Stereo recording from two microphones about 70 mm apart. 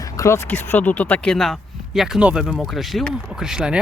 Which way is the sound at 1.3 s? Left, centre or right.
Centre.